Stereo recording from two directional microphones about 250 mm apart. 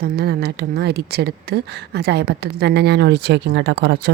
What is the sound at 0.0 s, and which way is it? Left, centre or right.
Speech, right.